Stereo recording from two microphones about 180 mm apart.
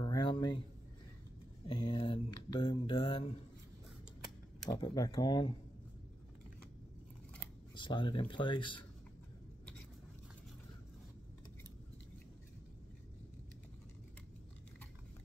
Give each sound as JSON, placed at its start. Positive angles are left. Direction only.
{"t": 0.0, "sound": "a sound", "side_deg": 25}
{"t": 1.7, "sound": "mantra", "side_deg": 30}
{"t": 4.6, "sound": "speech", "side_deg": 25}
{"t": 7.7, "sound": "speech", "side_deg": 25}